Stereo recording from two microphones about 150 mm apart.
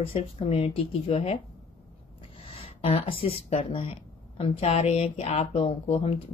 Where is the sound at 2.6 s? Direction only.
35° left (ahead or behind).